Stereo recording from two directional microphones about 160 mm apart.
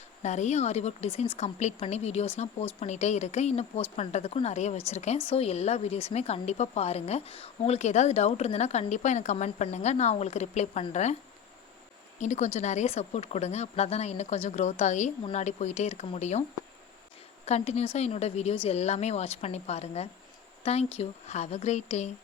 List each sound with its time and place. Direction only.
0.2 s a woman's voice: 45° left (ahead or behind)
12.2 s a woman's voice: 50° left (ahead or behind)
17.4 s a woman's voice: 40° left (ahead or behind)